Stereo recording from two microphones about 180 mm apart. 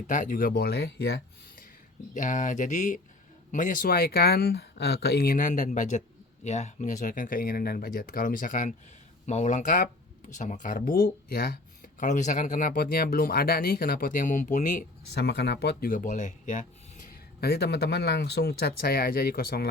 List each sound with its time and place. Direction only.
0.1 s speech: 45° left (ahead or behind); by 1.6 s 65° left (ahead or behind)
2.1 s speech: 45° left (ahead or behind)
15.1 s speech: 70° left (ahead or behind); by 16.6 s 45° left (ahead or behind)
17.4 s speech: 65° left (ahead or behind)